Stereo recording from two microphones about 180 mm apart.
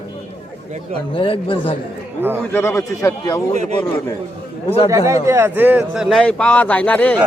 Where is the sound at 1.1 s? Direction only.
30° left (ahead or behind).